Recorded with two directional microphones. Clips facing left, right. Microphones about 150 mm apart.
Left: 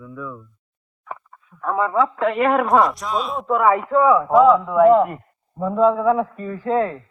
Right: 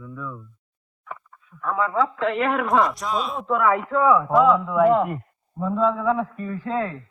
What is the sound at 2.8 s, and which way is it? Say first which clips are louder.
Speech: left 3 dB; centre (ahead or behind).